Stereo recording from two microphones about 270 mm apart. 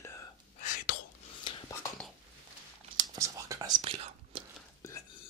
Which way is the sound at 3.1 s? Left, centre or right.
Centre.